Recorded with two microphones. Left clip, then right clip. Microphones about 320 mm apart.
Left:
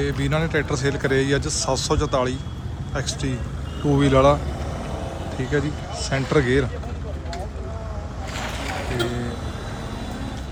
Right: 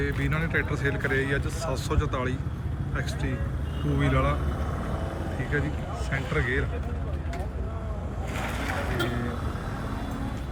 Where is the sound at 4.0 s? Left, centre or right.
Centre.